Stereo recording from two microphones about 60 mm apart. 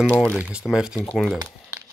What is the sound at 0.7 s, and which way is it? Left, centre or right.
Speech, centre.